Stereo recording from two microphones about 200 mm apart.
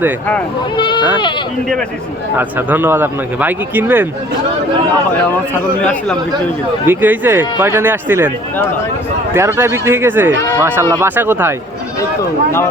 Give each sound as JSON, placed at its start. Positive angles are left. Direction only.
{"t": 0.8, "sound": "bleat", "side_deg": 25}
{"t": 2.4, "sound": "speech", "side_deg": -10}
{"t": 5.8, "sound": "speech", "side_deg": 5}
{"t": 6.8, "sound": "speech", "side_deg": -10}
{"t": 9.3, "sound": "speech", "side_deg": -10}